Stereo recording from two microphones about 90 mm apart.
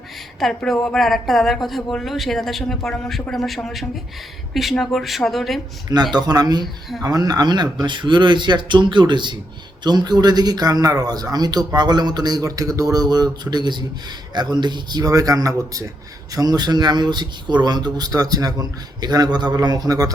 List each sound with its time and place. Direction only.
0.3 s speech: centre (ahead or behind)
5.9 s speech: 50° right (ahead or behind)